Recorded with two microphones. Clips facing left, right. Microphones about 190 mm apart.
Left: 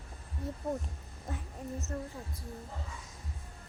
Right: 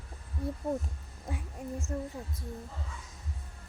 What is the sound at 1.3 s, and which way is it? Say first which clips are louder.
Speech: right 2 dB; 10° right (ahead or behind).